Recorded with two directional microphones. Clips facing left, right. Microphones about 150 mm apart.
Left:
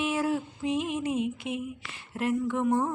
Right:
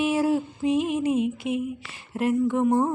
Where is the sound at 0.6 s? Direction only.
5° right (ahead or behind).